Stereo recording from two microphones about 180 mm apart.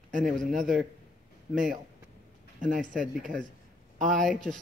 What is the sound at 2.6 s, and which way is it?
Speech, 45° right (ahead or behind).